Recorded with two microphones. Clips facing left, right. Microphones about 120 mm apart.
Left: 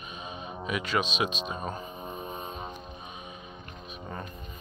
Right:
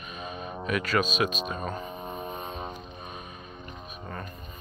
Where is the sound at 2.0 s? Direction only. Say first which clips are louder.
Right 2 dB; 35° right (ahead or behind).